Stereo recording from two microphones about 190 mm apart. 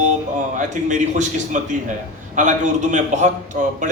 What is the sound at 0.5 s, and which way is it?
A man's voice, 40° right (ahead or behind).